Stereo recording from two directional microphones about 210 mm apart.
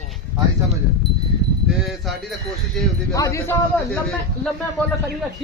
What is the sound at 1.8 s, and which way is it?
Speech, centre (ahead or behind).